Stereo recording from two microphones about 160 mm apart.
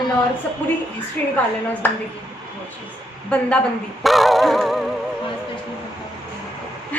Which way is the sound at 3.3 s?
5° left (ahead or behind).